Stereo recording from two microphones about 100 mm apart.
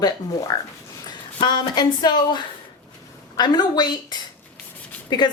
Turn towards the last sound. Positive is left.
turn(degrees=50)  # may be behind; listen again after turning